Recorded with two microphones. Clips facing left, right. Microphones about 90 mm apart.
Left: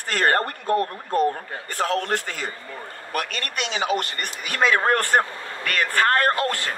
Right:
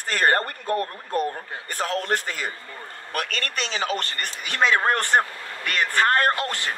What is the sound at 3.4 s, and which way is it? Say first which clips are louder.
Speech: left 1 dB; 35° right (ahead or behind).